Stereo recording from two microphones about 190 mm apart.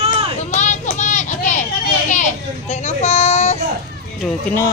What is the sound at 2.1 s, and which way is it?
Children playing, 40° left (ahead or behind).